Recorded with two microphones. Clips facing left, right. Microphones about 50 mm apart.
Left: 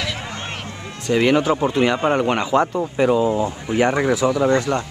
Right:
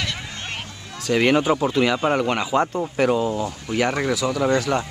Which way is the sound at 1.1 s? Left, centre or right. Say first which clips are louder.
Left 1 dB; centre.